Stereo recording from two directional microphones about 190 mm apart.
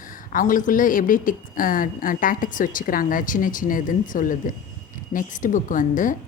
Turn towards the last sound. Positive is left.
turn(degrees=45)  # may be behind; listen again after turning